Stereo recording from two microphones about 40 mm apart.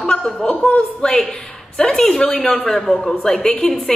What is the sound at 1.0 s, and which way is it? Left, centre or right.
A man's voice, left.